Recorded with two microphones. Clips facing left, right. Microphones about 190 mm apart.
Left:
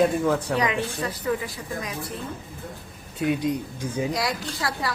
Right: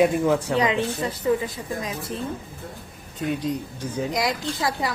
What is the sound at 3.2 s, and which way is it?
Speech, 10° left (ahead or behind).